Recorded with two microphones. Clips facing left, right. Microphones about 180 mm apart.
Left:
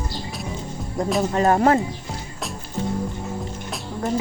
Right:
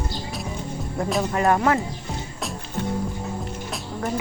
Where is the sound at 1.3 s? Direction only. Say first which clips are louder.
Left 2 dB; 30° left (ahead or behind).